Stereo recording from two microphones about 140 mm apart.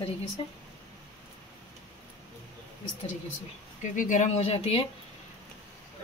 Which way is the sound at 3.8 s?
60° left (ahead or behind).